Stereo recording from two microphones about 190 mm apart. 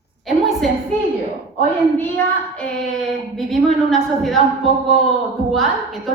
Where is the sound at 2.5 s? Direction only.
5° left (ahead or behind).